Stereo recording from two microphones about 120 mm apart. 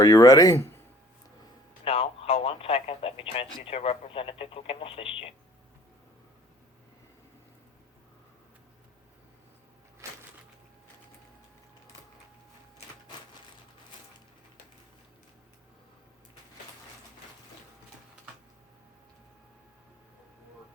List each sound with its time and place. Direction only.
0.0 s speech: 30° left (ahead or behind)
1.8 s speech: 55° left (ahead or behind)
10.0 s a sound: 25° right (ahead or behind)